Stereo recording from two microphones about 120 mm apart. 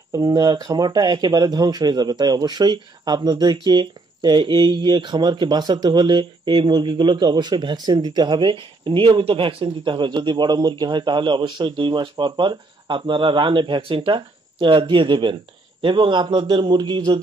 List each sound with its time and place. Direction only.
0.1 s speech: 35° right (ahead or behind)